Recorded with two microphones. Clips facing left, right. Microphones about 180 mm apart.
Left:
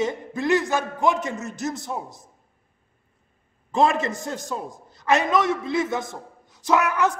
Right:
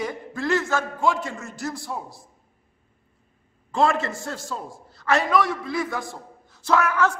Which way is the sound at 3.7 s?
20° left (ahead or behind).